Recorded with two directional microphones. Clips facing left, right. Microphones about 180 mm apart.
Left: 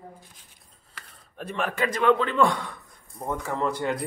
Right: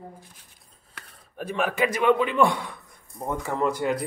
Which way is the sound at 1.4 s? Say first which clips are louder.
Right 3 dB; 5° right (ahead or behind).